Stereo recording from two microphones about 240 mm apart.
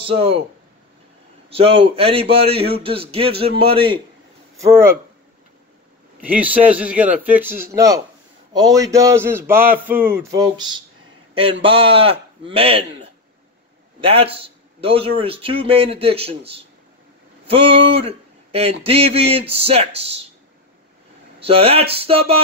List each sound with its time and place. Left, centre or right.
0.0 s a man's voice: right
1.5 s a man's voice: right
4.6 s a sound: centre
6.2 s a sound: centre
11.6 s a man's voice: right
17.9 s a man's voice: right
21.4 s a man's voice: right